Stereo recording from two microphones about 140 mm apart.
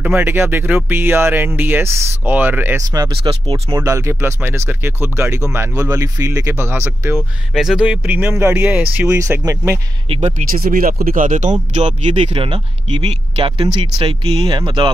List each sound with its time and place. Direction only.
0.0 s speech: 15° right (ahead or behind)
3.3 s speech: 45° right (ahead or behind)
3.7 s speech: 20° right (ahead or behind)
7.2 s speech: centre (ahead or behind)
9.1 s speech: 25° right (ahead or behind)
10.0 s speech: 45° right (ahead or behind)
10.5 s speech: 85° right; by 12.2 s 55° right (ahead or behind)
12.2 s speech: 40° right (ahead or behind)